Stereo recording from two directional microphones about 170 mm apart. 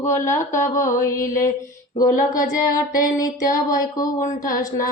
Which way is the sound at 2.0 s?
20° left (ahead or behind).